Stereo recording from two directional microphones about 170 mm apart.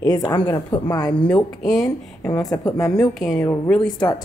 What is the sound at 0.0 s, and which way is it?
A woman's voice, 25° left (ahead or behind).